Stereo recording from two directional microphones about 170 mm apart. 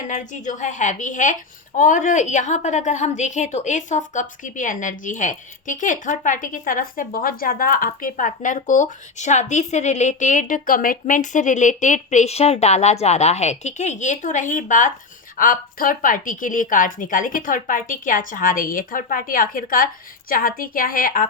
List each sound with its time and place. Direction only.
0.1 s a woman's voice: 45° left (ahead or behind)